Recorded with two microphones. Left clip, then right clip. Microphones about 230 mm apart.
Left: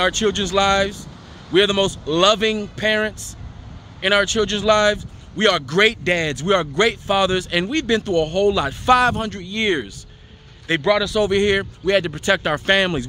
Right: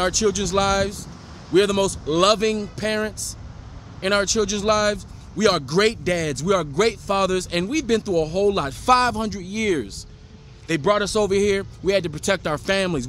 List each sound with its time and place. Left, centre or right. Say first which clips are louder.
0.0 s a man's voice: left 2 dB; centre
10.7 s a man's voice: left 2 dB; centre